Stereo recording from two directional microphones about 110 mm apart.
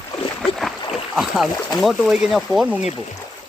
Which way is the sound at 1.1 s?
Centre (ahead or behind).